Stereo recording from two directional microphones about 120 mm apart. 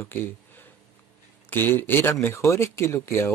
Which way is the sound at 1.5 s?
15° left (ahead or behind).